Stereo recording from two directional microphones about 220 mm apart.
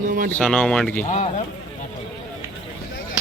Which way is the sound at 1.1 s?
30° left (ahead or behind).